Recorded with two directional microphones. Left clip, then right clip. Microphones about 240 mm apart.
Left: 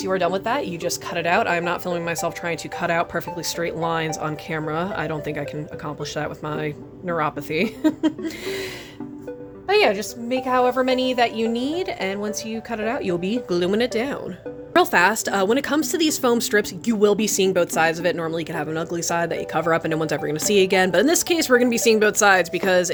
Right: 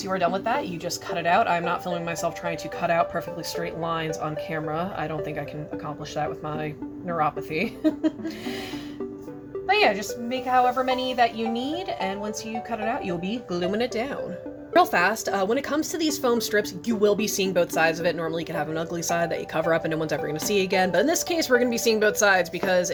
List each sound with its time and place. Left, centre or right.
0.0 s speech: left
6.1 s speech: left
9.6 s a woman's voice: left